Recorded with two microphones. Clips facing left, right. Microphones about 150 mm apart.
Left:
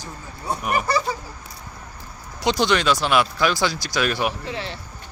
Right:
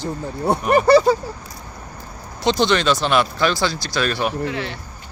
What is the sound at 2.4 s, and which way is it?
Speech, 10° left (ahead or behind).